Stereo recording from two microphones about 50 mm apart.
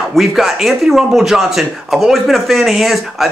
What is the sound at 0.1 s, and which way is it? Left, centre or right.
A man's voice, centre.